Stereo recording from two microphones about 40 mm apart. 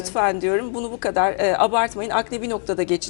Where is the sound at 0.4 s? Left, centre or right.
Centre.